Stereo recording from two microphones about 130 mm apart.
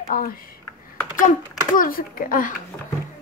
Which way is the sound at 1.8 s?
90° left.